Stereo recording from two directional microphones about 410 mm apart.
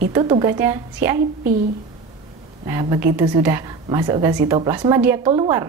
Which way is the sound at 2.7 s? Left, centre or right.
Centre.